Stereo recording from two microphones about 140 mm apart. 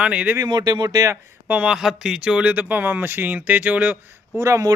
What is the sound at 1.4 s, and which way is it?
Speech, 10° right (ahead or behind).